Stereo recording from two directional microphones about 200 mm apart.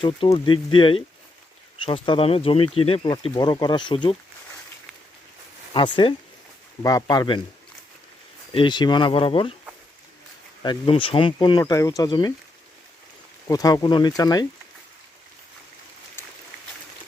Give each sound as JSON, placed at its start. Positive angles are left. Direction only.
{"t": 0.0, "sound": "speech", "side_deg": 25}
{"t": 5.7, "sound": "speech", "side_deg": 25}
{"t": 8.5, "sound": "speech", "side_deg": 20}
{"t": 10.6, "sound": "speech", "side_deg": 25}
{"t": 13.5, "sound": "speech", "side_deg": 20}